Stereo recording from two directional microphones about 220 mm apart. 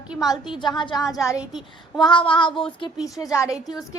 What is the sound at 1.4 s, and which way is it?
Speech, centre (ahead or behind).